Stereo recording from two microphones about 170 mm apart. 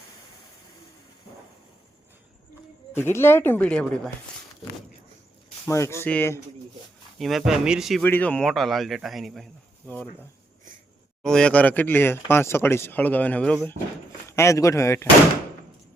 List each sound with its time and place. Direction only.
2.9 s speech: 15° left (ahead or behind)
5.6 s speech: 15° left (ahead or behind)
7.2 s speech: centre (ahead or behind)
8.0 s speech: 10° left (ahead or behind)
11.2 s speech: 5° left (ahead or behind)
14.3 s speech: 15° left (ahead or behind)